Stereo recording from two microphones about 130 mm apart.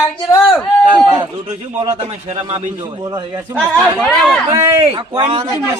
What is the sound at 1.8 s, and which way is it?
Speech, 50° right (ahead or behind).